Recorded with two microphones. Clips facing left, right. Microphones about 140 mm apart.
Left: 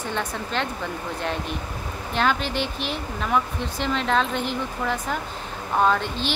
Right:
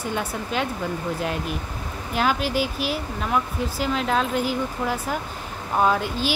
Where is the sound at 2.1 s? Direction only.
5° right (ahead or behind).